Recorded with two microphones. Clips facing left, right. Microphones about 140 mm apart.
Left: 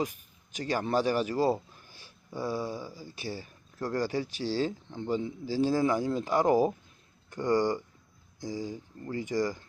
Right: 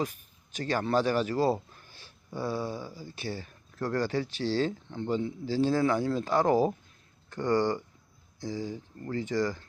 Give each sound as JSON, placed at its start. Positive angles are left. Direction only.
{"t": 0.0, "sound": "speech", "side_deg": 15}